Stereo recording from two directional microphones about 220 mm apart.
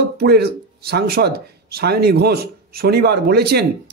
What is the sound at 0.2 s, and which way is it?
Speech, 45° right (ahead or behind).